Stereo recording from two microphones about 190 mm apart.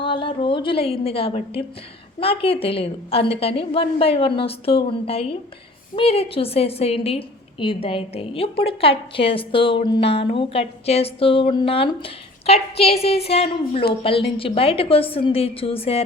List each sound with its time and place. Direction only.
0.0 s a woman's voice: 25° left (ahead or behind)